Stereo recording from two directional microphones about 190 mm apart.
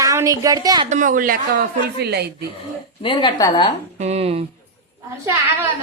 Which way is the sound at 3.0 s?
25° left (ahead or behind).